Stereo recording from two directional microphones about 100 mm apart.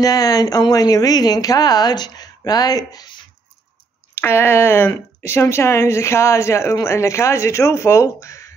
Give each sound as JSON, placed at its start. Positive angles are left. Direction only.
{"t": 0.0, "sound": "speech", "side_deg": 40}
{"t": 4.1, "sound": "a woman's voice", "side_deg": 25}